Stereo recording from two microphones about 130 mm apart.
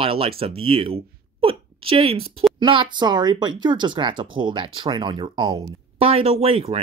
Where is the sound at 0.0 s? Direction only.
45° right (ahead or behind).